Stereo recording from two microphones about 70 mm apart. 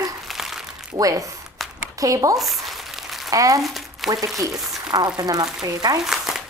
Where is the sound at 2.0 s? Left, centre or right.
Right.